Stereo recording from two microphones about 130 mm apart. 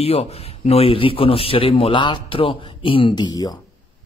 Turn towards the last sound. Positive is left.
turn(degrees=30)  # may be behind; listen again after turning